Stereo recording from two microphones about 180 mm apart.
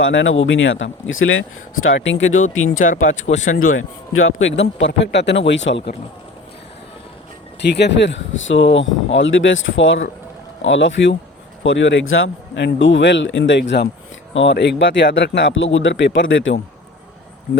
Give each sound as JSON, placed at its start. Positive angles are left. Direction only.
{"t": 0.0, "sound": "speech", "side_deg": 90}
{"t": 2.8, "sound": "speech", "side_deg": 45}
{"t": 3.8, "sound": "speech", "side_deg": 90}
{"t": 5.5, "sound": "speech", "side_deg": 90}
{"t": 7.6, "sound": "speech", "side_deg": 70}